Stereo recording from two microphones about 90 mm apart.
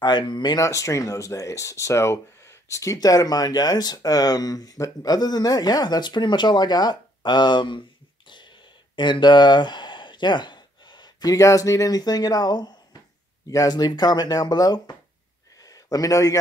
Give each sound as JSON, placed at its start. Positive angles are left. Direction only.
{"t": 0.3, "sound": "speech", "side_deg": 55}
{"t": 0.6, "sound": "speech", "side_deg": 35}
{"t": 8.9, "sound": "speech", "side_deg": 55}
{"t": 15.6, "sound": "a sound", "side_deg": 40}